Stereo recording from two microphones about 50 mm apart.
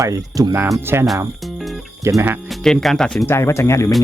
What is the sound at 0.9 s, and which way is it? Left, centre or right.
Speech, right.